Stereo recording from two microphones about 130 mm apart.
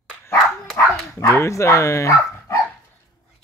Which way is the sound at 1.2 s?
20° left (ahead or behind).